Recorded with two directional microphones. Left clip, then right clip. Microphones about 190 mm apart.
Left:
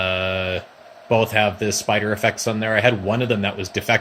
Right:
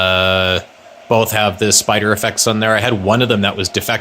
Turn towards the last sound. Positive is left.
turn(degrees=-35)  # may be behind; listen again after turning